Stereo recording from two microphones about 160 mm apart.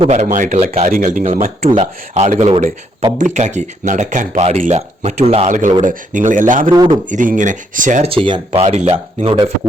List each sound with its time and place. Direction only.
0.0 s speech: 45° right (ahead or behind)
0.9 s speech: 55° right (ahead or behind)
6.7 s a man's voice: 30° right (ahead or behind)
7.1 s speech: 50° right (ahead or behind)
8.1 s speech: 35° right (ahead or behind)